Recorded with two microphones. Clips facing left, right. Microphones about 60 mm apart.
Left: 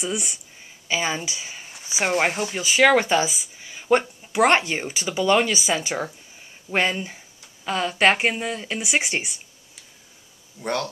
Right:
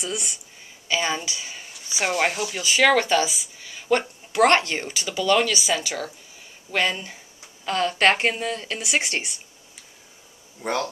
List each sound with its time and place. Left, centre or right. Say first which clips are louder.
0.0 s speech: left 2 dB; left
7.6 s speech: even; centre
10.6 s speech: even; centre